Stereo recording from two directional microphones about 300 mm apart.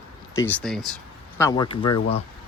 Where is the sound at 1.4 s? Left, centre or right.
Centre.